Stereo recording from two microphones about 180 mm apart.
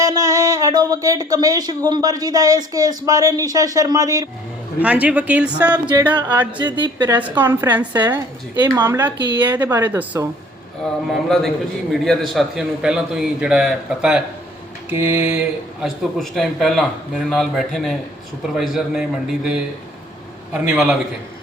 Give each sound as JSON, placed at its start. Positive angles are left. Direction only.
{"t": 0.0, "sound": "speech", "side_deg": -20}
{"t": 4.8, "sound": "speech", "side_deg": -5}
{"t": 6.0, "sound": "speech", "side_deg": -25}
{"t": 7.1, "sound": "speech", "side_deg": -10}
{"t": 8.5, "sound": "speech", "side_deg": -25}
{"t": 8.8, "sound": "speech", "side_deg": -10}
{"t": 11.1, "sound": "a man's voice", "side_deg": 0}